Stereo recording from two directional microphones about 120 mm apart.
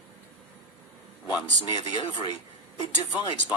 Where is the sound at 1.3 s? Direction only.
35° left (ahead or behind).